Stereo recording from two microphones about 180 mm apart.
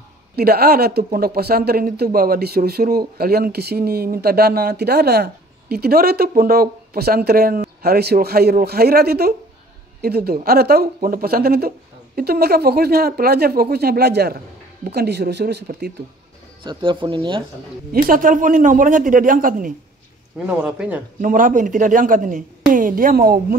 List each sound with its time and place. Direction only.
0.4 s speech: 60° right (ahead or behind)
16.6 s speech: 25° right (ahead or behind)
17.9 s a woman's voice: 50° right (ahead or behind)
20.3 s a man's voice: 10° right (ahead or behind)
21.2 s a woman's voice: 50° right (ahead or behind)